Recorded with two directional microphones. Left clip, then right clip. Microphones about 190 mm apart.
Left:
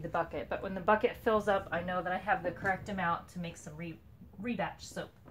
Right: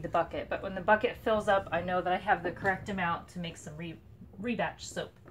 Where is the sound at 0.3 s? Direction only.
40° left (ahead or behind).